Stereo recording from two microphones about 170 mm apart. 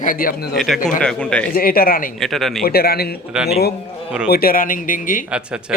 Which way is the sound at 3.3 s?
5° right (ahead or behind).